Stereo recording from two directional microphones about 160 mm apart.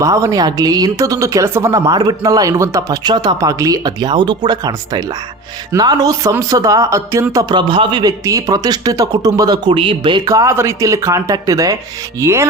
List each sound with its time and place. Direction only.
0.0 s speech: 20° right (ahead or behind)
12.2 s music: 20° right (ahead or behind)